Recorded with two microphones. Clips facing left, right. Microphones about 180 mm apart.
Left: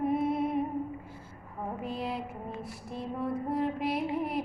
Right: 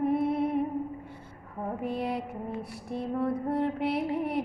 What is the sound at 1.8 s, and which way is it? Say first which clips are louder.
Female singing: right 4 dB; 60° right (ahead or behind).